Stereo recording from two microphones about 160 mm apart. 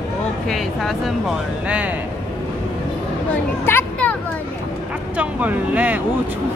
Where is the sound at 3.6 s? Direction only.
15° left (ahead or behind).